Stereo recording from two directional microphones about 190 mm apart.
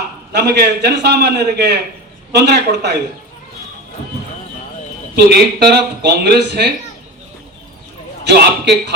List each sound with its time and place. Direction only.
0.3 s speech: 60° right (ahead or behind)
5.1 s speech: 60° right (ahead or behind)
8.2 s speech: 60° right (ahead or behind)